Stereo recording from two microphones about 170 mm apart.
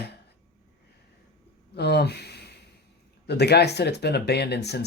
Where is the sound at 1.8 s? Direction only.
75° left (ahead or behind).